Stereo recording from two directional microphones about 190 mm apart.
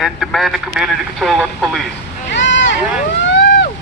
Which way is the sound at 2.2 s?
70° left (ahead or behind).